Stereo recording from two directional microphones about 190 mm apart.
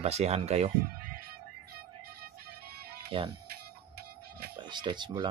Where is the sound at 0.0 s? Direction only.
35° right (ahead or behind).